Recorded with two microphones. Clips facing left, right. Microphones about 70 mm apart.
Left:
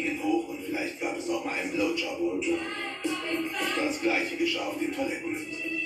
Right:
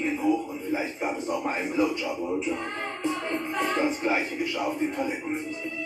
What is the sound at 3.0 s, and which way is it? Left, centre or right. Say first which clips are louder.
Speech: right 1 dB; right.